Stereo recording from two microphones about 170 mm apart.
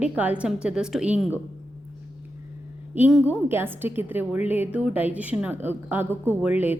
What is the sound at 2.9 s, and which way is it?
A woman's voice, 10° right (ahead or behind).